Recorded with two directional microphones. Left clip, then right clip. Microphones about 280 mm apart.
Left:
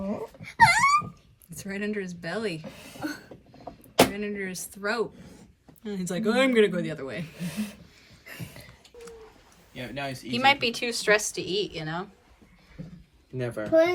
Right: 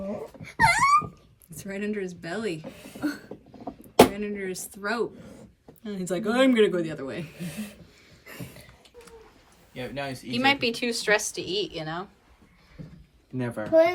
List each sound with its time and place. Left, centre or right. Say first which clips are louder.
0.0 s wail: left 1 dB; centre
0.4 s dog: left 1 dB; centre
1.5 s a woman's voice: even; centre
3.6 s a sound: right 4 dB; right
4.1 s a woman's voice: right 1 dB; centre
9.9 s speech: left 1 dB; right
10.3 s a woman's voice: left 1 dB; centre
13.3 s a child's voice: right 1 dB; right